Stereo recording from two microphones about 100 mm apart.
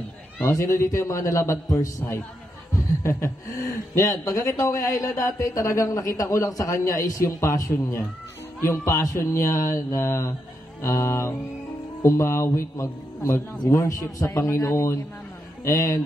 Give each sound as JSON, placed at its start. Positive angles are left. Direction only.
{"t": 0.5, "sound": "a man's voice", "side_deg": 30}